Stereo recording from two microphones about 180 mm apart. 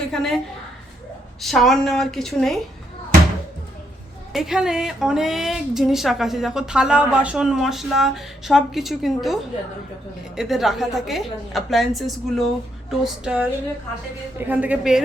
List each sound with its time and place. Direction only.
0.1 s a woman's voice: centre (ahead or behind)
1.4 s a woman's voice: centre (ahead or behind)
4.3 s a woman's voice: centre (ahead or behind)